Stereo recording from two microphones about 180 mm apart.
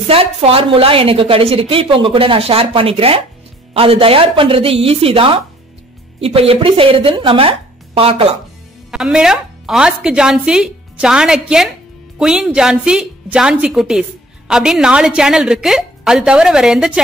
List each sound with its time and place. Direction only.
0.0 s a woman's voice: 30° right (ahead or behind)
8.9 s a woman's voice: 5° right (ahead or behind)